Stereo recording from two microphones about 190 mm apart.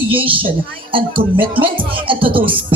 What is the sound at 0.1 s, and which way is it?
Music, 30° right (ahead or behind).